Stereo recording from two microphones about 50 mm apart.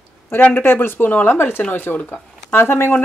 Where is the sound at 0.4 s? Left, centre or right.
Left.